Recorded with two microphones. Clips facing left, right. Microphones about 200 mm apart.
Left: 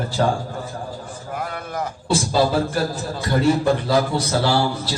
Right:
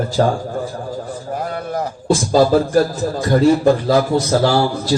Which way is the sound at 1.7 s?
40° right (ahead or behind).